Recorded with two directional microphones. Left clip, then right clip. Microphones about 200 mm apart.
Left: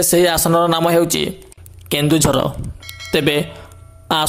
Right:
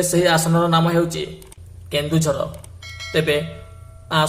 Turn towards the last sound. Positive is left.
turn(degrees=50)  # may be behind; listen again after turning